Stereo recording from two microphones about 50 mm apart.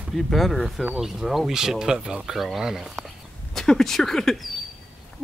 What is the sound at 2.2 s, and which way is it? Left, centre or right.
Speech, centre.